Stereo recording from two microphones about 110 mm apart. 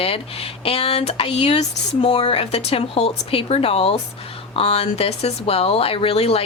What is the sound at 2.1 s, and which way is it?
Speech, 55° left (ahead or behind).